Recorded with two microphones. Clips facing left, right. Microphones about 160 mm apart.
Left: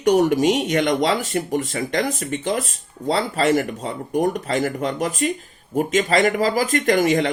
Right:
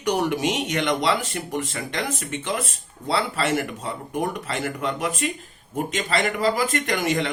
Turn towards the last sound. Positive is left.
turn(degrees=45)  # may be behind; listen again after turning